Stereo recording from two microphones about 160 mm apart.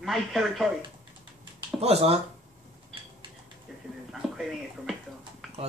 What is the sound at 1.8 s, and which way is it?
Speech, 40° right (ahead or behind).